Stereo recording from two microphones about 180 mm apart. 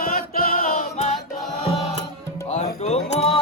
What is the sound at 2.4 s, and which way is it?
Music, 35° left (ahead or behind).